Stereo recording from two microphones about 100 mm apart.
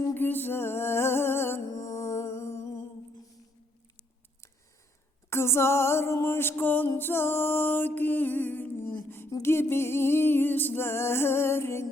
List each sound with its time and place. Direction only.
0.0 s music: 20° left (ahead or behind)
5.3 s music: 25° left (ahead or behind)